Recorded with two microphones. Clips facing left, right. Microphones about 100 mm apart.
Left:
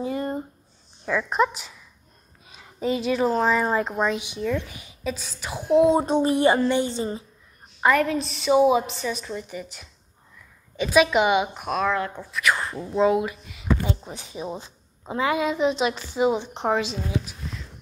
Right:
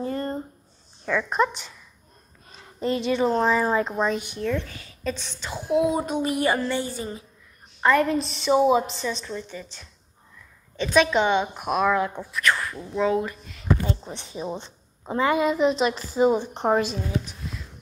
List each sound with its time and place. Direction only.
0.0 s a sound: 10° left (ahead or behind)
1.0 s speech: 5° left (ahead or behind)
5.1 s speech: 5° left (ahead or behind)
5.7 s a child's voice: 25° left (ahead or behind)
7.9 s a woman's voice: centre (ahead or behind)
11.5 s speech: 5° right (ahead or behind)
12.5 s a child's voice: 20° left (ahead or behind)
13.2 s speech: 5° left (ahead or behind)